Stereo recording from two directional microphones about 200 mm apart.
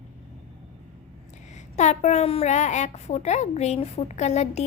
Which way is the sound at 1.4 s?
35° left (ahead or behind).